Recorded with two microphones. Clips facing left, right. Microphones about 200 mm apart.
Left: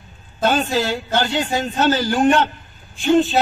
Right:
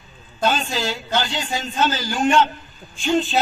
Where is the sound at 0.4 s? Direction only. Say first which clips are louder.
Left 4 dB; 55° left (ahead or behind).